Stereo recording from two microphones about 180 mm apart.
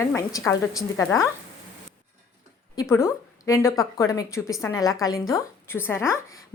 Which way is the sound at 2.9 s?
15° left (ahead or behind).